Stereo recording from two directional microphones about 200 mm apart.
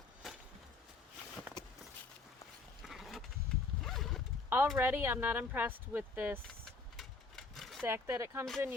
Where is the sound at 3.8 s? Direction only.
Centre (ahead or behind).